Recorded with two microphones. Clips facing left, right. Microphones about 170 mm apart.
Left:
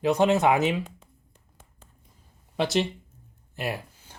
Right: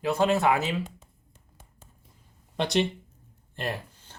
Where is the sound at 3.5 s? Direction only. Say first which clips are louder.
Left 1 dB; 10° left (ahead or behind).